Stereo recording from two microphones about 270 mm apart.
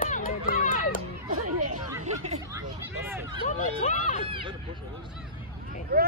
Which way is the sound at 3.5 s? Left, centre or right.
Left.